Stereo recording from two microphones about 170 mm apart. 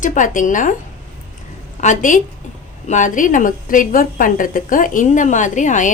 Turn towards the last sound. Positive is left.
turn(degrees=45)  # may be behind; listen again after turning